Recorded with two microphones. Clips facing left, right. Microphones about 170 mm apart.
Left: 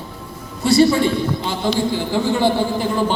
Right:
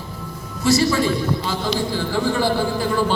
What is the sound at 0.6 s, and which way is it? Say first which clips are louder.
Speech: left 4 dB; 30° left (ahead or behind).